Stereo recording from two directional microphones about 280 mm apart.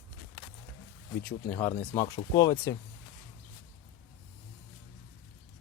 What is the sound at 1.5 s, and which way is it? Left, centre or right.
Speech, centre.